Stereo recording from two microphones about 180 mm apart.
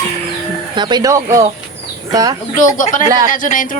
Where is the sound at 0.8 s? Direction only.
25° right (ahead or behind).